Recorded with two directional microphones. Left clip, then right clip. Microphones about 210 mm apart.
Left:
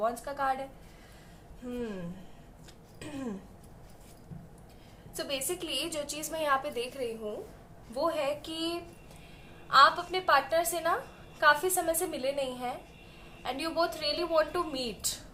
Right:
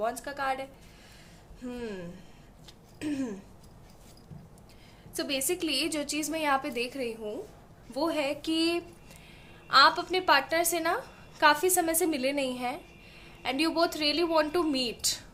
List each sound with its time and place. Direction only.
0.0 s a woman's voice: 50° right (ahead or behind)
5.1 s a woman's voice: 45° right (ahead or behind)